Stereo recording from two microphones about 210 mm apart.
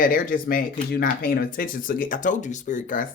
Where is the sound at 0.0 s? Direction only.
40° left (ahead or behind).